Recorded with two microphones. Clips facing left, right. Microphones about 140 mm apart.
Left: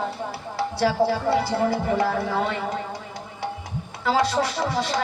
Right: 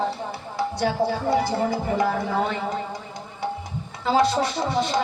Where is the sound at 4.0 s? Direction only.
25° right (ahead or behind).